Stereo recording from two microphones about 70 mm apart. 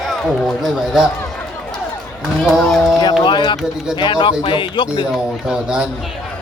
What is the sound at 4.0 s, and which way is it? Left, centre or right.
Speech, left.